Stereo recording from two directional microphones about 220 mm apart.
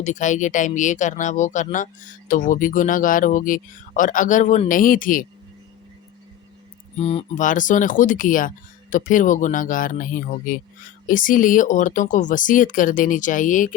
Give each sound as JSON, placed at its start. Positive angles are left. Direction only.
{"t": 0.0, "sound": "speech", "side_deg": 35}
{"t": 6.9, "sound": "speech", "side_deg": 25}